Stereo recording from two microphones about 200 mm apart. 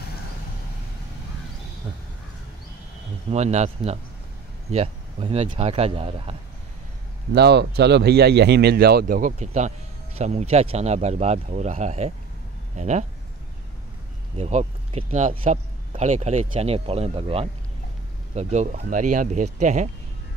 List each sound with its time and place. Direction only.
3.3 s speech: 35° right (ahead or behind)
7.3 s speech: 55° right (ahead or behind); by 13.0 s 35° right (ahead or behind)
14.3 s speech: 35° right (ahead or behind)